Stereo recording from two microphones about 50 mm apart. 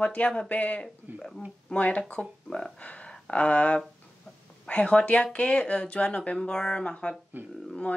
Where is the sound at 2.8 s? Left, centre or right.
Left.